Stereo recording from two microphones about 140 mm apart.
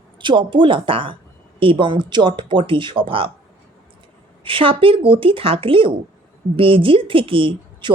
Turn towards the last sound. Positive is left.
turn(degrees=-35)  # may be behind; listen again after turning